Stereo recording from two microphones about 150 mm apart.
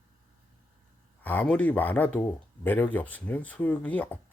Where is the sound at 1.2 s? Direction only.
10° left (ahead or behind).